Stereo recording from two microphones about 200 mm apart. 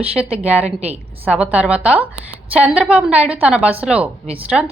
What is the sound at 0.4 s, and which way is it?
A woman's voice, 5° right (ahead or behind).